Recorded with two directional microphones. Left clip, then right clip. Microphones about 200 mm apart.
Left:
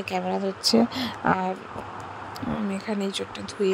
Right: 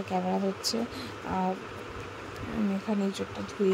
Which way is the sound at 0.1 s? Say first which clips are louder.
Left 3 dB; 40° left (ahead or behind).